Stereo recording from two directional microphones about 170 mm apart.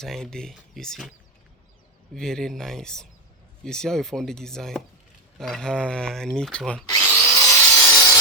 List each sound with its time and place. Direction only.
0.0 s speech: 5° left (ahead or behind)
2.1 s speech: 5° left (ahead or behind)
6.8 s drill: 20° left (ahead or behind)
7.3 s wood: 20° left (ahead or behind)